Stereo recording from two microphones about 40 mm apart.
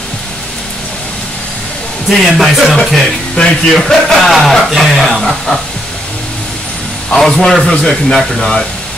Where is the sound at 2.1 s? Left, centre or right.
Centre.